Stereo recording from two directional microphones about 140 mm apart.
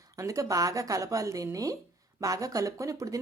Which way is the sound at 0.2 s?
25° right (ahead or behind).